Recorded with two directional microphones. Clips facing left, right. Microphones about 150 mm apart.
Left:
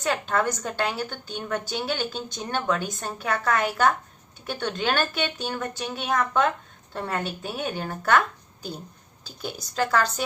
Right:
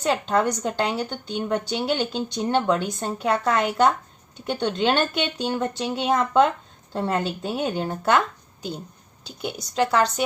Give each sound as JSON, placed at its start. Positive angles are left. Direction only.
{"t": 0.1, "sound": "a woman's voice", "side_deg": -20}
{"t": 9.2, "sound": "a woman's voice", "side_deg": -25}